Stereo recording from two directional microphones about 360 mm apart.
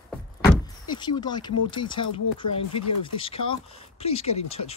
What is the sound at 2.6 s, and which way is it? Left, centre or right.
Speech, left.